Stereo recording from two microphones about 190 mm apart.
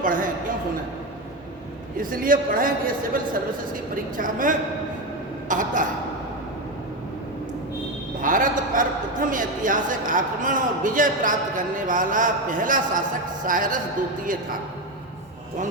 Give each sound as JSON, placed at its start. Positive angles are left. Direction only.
{"t": 0.0, "sound": "a man's voice", "side_deg": -45}
{"t": 2.0, "sound": "a man's voice", "side_deg": -45}
{"t": 4.2, "sound": "a man's voice", "side_deg": -45}
{"t": 8.2, "sound": "a man's voice", "side_deg": -45}